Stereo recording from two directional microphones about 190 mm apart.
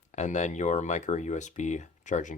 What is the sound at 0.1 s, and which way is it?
Speech, 40° left (ahead or behind).